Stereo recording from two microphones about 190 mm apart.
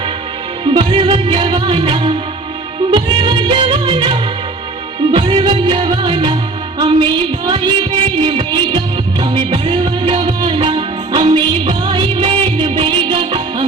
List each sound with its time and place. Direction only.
0.6 s music: 25° right (ahead or behind)